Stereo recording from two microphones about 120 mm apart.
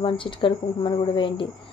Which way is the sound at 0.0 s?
45° left (ahead or behind).